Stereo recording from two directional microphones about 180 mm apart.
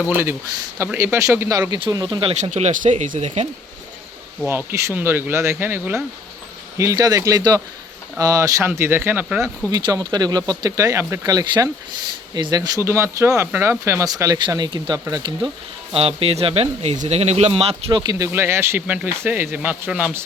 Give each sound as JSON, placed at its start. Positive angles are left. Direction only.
{"t": 0.1, "sound": "speech", "side_deg": -15}
{"t": 2.4, "sound": "speech", "side_deg": -40}
{"t": 4.4, "sound": "speech", "side_deg": -15}
{"t": 17.8, "sound": "speech", "side_deg": -20}